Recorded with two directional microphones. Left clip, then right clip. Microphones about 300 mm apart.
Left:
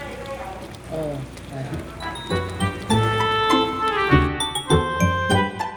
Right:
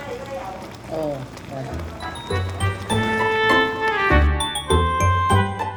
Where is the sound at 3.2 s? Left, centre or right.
Centre.